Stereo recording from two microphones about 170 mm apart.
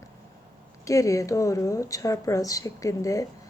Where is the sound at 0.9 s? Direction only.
20° left (ahead or behind).